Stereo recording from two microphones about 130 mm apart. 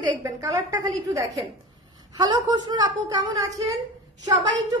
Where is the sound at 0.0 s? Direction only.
25° right (ahead or behind).